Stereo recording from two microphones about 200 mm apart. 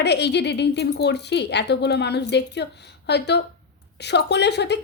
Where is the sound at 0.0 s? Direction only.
55° left (ahead or behind).